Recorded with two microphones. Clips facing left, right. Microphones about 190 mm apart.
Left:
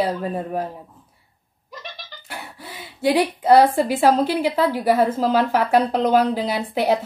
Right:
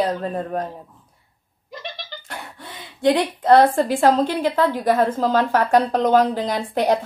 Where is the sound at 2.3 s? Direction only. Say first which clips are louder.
Left 2 dB; 5° left (ahead or behind).